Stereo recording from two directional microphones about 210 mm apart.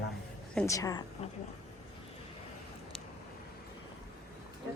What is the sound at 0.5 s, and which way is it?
Speech, 15° left (ahead or behind).